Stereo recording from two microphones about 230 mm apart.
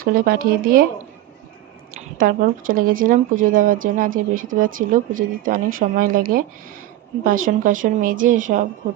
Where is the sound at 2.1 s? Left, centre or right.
Right.